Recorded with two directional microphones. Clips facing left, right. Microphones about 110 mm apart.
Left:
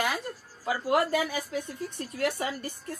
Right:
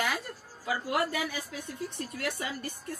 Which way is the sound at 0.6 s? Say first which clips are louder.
Left 4 dB; 45° left (ahead or behind).